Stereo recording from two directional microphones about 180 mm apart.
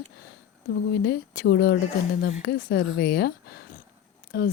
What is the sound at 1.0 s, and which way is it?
Speech, 55° left (ahead or behind).